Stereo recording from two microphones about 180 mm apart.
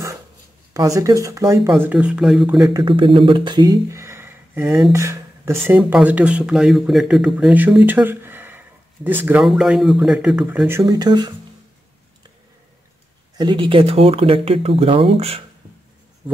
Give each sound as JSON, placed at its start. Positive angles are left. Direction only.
{"t": 0.7, "sound": "speech", "side_deg": -20}
{"t": 2.7, "sound": "speech", "side_deg": -25}
{"t": 10.7, "sound": "speech", "side_deg": -20}
{"t": 13.4, "sound": "speech", "side_deg": -25}